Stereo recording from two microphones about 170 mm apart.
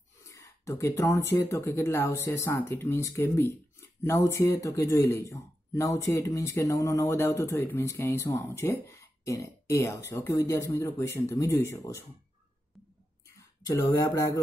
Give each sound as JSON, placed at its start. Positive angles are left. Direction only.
{"t": 0.2, "sound": "speech", "side_deg": 15}
{"t": 13.4, "sound": "speech", "side_deg": 20}